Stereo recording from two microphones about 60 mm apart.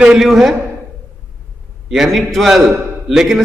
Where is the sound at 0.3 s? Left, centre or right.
Centre.